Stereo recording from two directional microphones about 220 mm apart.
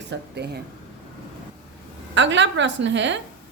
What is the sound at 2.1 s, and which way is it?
A woman's voice, 55° right (ahead or behind).